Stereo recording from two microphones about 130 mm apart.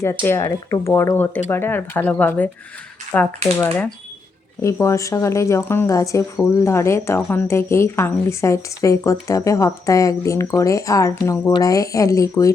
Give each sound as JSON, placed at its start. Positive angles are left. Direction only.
{"t": 0.0, "sound": "speech", "side_deg": 20}
{"t": 4.6, "sound": "speech", "side_deg": 25}